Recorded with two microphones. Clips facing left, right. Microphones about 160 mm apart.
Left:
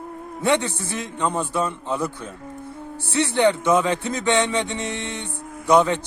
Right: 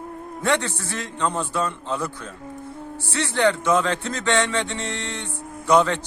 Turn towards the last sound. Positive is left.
turn(degrees=15)  # may be behind; listen again after turning